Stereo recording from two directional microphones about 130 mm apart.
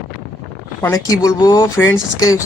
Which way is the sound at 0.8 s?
25° left (ahead or behind).